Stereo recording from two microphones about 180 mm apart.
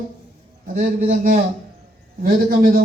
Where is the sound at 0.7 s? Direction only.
40° right (ahead or behind).